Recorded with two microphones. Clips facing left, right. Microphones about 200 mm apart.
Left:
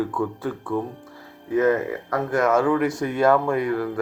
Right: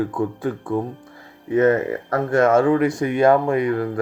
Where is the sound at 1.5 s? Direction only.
65° right (ahead or behind).